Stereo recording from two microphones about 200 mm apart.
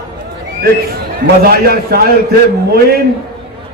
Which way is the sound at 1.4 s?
50° right (ahead or behind).